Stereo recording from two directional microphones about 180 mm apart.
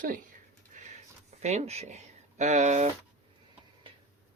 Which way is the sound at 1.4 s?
40° right (ahead or behind).